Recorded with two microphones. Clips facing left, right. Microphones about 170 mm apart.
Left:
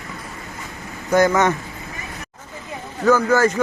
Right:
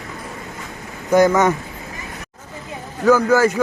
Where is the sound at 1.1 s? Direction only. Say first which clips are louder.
Right 2 dB; 10° right (ahead or behind).